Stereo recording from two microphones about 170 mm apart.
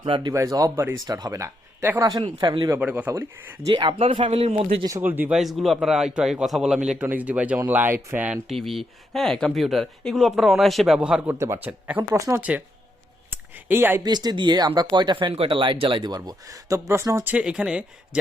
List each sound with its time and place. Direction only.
0.0 s speech: 30° right (ahead or behind)
2.2 s speech: 25° right (ahead or behind)
3.6 s speech: 30° right (ahead or behind)
4.9 s speech: 15° right (ahead or behind)
13.3 s a sound: 10° right (ahead or behind)
14.0 s speech: 25° right (ahead or behind); by 18.2 s 5° right (ahead or behind)